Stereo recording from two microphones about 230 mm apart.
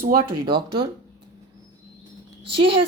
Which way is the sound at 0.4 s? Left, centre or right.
Right.